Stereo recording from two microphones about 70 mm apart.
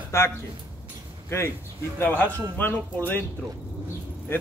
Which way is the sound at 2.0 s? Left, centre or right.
Left.